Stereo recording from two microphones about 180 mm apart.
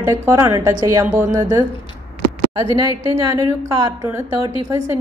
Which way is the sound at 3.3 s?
15° right (ahead or behind).